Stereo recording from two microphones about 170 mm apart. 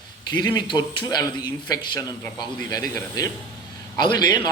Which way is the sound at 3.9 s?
25° left (ahead or behind).